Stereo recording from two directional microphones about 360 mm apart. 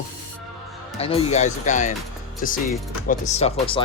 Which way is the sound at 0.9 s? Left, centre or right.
Centre.